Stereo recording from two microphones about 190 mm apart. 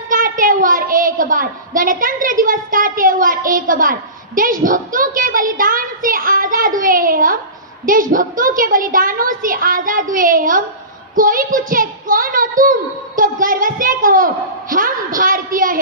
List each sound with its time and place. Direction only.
0.1 s a woman's voice: 45° right (ahead or behind)